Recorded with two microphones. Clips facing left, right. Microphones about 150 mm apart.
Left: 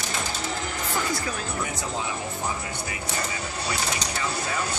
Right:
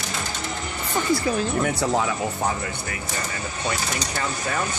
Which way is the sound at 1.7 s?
70° right (ahead or behind).